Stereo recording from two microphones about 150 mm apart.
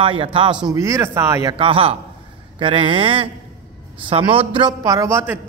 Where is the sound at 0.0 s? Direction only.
35° right (ahead or behind).